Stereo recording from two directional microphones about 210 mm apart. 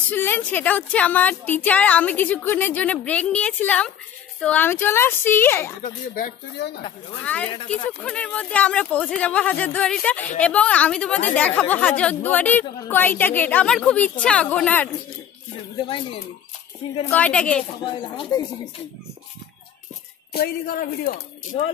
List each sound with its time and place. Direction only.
0.1 s a woman's voice: 10° left (ahead or behind)
5.8 s speech: 40° left (ahead or behind)
7.3 s a woman's voice: 10° left (ahead or behind)
17.1 s speech: 5° left (ahead or behind)
17.8 s speech: 25° left (ahead or behind)
20.3 s speech: 45° left (ahead or behind)